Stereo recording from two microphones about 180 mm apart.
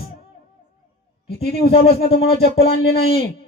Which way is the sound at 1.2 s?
60° left (ahead or behind).